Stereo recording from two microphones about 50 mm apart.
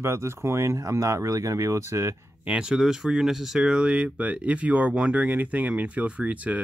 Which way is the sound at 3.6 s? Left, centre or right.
Centre.